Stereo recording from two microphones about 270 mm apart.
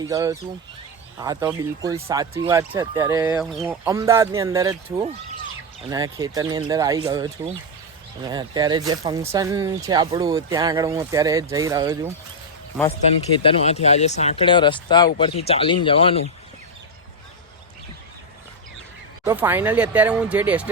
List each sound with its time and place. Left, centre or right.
0.1 s speech: centre
13.4 s speech: left
19.2 s speech: centre